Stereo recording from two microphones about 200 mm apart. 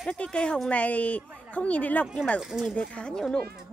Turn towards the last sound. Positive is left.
turn(degrees=5)  # may be behind; listen again after turning